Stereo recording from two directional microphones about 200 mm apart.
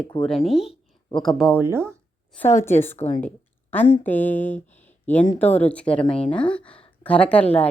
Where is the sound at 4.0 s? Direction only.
10° left (ahead or behind).